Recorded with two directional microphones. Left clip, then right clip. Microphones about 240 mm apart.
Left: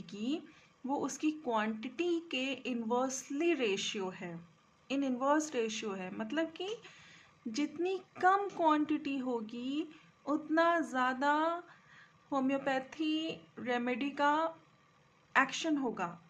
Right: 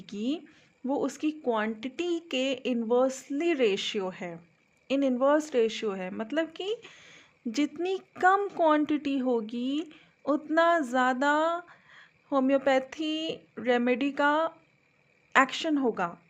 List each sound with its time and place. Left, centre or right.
0.0 s a woman's voice: right